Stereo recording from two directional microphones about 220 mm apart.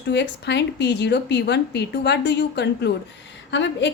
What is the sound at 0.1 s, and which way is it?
A woman's voice, 50° left (ahead or behind).